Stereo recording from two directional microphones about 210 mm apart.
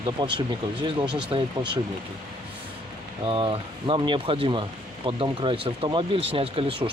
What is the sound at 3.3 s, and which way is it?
Speech, 25° right (ahead or behind).